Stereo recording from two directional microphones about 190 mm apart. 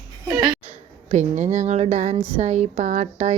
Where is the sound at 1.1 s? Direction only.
35° right (ahead or behind).